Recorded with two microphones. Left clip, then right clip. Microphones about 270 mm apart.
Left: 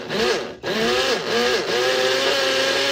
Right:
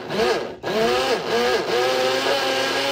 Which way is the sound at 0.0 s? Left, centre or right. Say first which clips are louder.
Even; centre.